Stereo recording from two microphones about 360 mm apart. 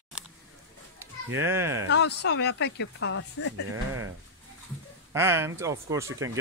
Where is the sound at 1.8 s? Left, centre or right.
Left.